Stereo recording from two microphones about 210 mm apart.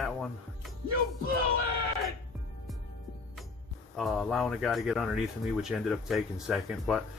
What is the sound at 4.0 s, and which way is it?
Speech, centre (ahead or behind).